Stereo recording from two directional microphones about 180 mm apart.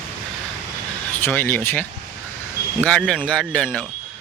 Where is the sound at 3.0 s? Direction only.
5° right (ahead or behind).